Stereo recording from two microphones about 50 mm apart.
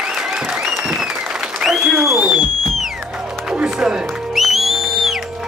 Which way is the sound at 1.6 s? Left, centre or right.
Centre.